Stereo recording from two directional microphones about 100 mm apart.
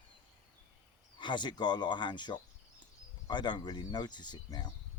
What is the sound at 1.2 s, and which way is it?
Speech, 50° left (ahead or behind).